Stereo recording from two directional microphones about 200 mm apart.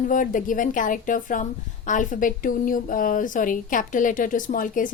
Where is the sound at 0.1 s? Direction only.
40° left (ahead or behind).